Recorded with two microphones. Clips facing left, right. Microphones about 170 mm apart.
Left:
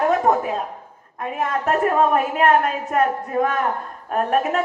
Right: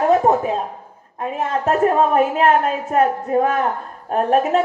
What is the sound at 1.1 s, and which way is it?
A woman's voice, 30° right (ahead or behind).